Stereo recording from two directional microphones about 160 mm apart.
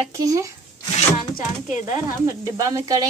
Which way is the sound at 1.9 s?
20° right (ahead or behind).